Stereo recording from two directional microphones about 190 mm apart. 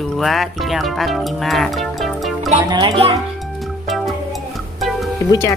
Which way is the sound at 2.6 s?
25° right (ahead or behind).